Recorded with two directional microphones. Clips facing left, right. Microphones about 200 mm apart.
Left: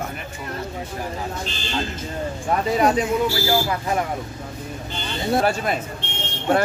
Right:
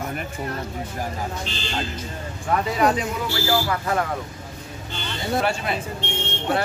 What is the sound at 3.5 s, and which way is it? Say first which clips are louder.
Speech: left 1 dB; 20° left (ahead or behind).